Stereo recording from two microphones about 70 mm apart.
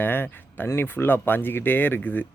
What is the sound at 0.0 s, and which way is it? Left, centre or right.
A man's voice, left.